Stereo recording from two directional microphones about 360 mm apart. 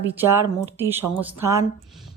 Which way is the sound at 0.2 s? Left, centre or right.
Centre.